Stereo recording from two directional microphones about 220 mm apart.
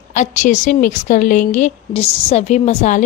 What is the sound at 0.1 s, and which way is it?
A woman's voice, 35° left (ahead or behind).